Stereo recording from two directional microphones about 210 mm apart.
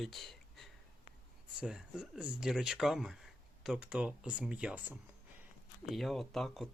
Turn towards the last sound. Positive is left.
turn(degrees=0)  # may be behind; listen again after turning